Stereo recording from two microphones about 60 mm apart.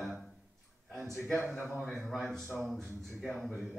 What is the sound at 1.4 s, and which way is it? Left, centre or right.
Speech, right.